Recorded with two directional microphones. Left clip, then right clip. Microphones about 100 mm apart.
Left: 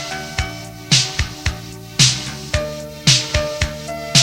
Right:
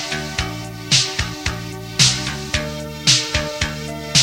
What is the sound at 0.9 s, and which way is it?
Music, 35° left (ahead or behind).